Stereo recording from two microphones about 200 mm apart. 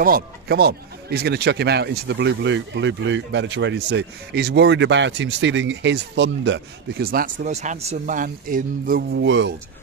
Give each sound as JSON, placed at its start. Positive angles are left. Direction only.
{"t": 0.0, "sound": "speech", "side_deg": -50}
{"t": 9.2, "sound": "speech", "side_deg": -65}